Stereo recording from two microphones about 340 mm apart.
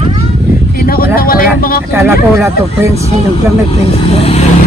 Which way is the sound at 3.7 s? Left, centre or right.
Centre.